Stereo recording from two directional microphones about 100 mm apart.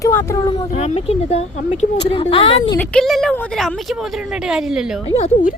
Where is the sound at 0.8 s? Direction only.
90° left.